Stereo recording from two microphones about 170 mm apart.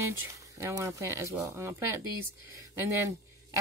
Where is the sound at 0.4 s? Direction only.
20° right (ahead or behind).